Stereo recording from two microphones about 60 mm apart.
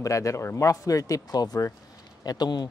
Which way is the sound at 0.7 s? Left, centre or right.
Left.